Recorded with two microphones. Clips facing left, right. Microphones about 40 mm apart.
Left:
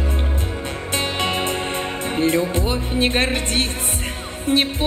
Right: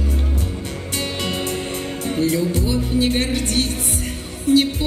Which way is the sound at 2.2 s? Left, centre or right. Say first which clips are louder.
Left 1 dB; left.